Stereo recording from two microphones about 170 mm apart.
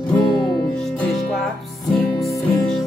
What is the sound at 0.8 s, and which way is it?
Music, 5° left (ahead or behind).